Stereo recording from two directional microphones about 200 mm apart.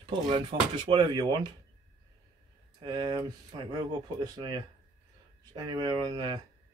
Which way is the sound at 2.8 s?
20° right (ahead or behind).